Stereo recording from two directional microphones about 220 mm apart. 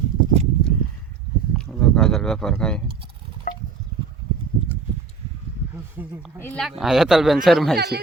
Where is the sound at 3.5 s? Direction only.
35° left (ahead or behind).